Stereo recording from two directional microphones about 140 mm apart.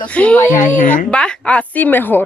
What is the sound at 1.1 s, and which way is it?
A woman's voice, 5° left (ahead or behind).